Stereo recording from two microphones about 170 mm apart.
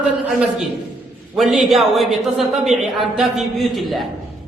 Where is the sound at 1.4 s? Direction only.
Centre (ahead or behind).